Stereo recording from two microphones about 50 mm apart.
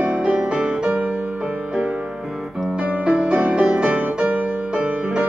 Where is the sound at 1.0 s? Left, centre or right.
Right.